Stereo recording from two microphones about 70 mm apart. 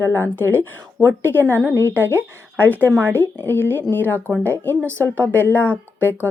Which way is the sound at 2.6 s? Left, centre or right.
Left.